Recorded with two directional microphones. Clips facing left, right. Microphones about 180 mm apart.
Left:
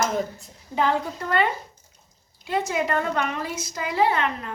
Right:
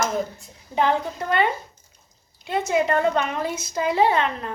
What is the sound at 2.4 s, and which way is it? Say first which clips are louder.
A woman's voice: right 3 dB; 25° right (ahead or behind).